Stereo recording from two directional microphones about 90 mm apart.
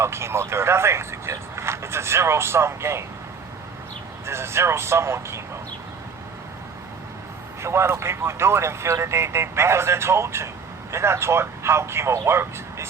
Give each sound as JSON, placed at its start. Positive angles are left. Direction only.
{"t": 0.0, "sound": "speech", "side_deg": -30}
{"t": 4.3, "sound": "speech", "side_deg": -30}
{"t": 7.6, "sound": "speech", "side_deg": -30}